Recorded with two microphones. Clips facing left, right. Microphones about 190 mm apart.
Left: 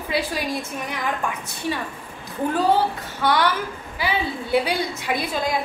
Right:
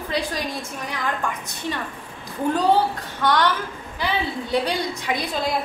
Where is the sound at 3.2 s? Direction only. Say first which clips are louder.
Even; 10° left (ahead or behind).